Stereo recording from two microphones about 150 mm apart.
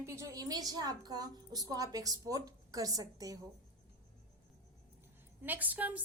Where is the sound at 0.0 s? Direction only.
20° right (ahead or behind).